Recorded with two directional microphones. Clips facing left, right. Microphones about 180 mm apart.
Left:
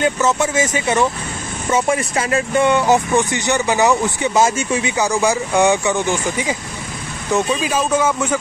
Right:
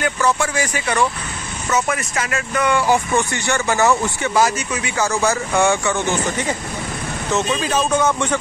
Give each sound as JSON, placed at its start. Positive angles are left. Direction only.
{"t": 0.0, "sound": "speech", "side_deg": 20}